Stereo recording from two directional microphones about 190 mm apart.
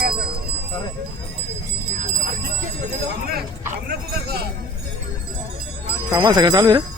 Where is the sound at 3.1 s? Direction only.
55° right (ahead or behind).